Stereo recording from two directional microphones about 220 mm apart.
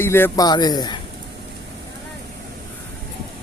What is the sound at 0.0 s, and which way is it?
Speech, 10° left (ahead or behind).